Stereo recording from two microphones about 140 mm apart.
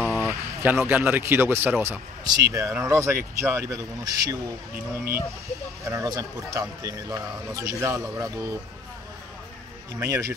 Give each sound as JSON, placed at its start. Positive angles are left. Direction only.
{"t": 0.3, "sound": "speech", "side_deg": -15}
{"t": 9.9, "sound": "speech", "side_deg": -20}